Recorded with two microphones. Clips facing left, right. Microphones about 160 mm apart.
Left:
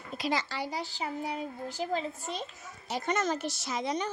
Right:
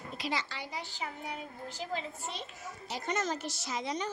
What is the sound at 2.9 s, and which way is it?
A woman's voice, 60° left (ahead or behind).